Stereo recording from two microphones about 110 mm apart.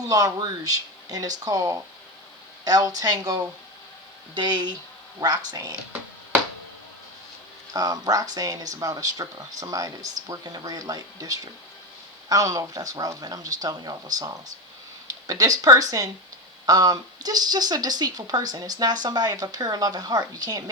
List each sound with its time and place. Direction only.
0.0 s speech: 35° right (ahead or behind)
7.7 s speech: 35° right (ahead or behind)